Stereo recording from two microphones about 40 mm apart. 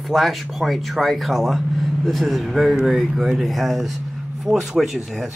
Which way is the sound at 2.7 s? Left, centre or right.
Centre.